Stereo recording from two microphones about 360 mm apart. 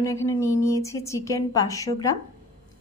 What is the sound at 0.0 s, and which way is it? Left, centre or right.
A woman's voice, centre.